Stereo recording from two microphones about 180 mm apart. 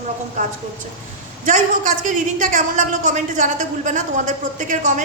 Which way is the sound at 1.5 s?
45° right (ahead or behind).